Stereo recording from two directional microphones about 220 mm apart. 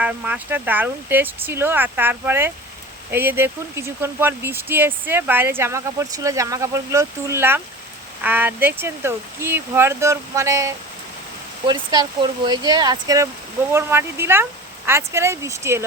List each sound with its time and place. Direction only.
0.0 s speech: 5° right (ahead or behind)